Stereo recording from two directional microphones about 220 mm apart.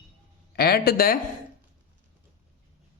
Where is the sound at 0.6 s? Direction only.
45° left (ahead or behind).